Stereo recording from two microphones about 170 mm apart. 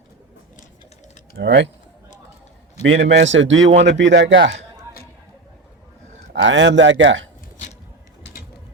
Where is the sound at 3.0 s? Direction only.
90° right.